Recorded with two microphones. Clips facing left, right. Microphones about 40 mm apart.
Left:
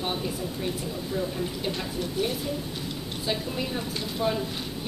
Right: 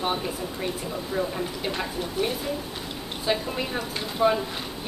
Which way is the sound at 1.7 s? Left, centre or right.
Centre.